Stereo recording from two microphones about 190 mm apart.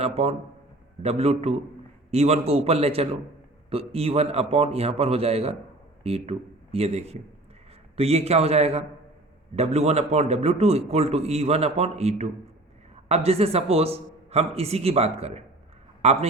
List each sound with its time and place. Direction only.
0.0 s a man's voice: 35° right (ahead or behind)